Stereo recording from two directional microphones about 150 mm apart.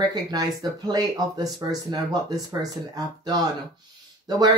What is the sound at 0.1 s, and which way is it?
Speech, 25° right (ahead or behind).